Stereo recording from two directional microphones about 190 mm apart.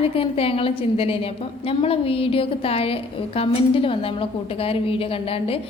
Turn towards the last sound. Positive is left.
turn(degrees=30)  # may be behind; listen again after turning